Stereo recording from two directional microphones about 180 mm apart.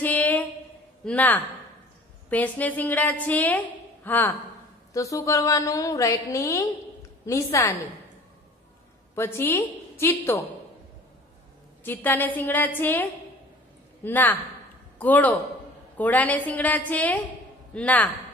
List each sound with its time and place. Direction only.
0.0 s a sound: 10° left (ahead or behind)
1.0 s a woman's voice: 10° left (ahead or behind)
9.1 s a woman's voice: 15° left (ahead or behind)
11.8 s a woman's voice: 10° left (ahead or behind)